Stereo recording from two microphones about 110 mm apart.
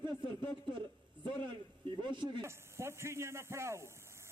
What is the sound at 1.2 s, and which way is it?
Speech, 45° right (ahead or behind).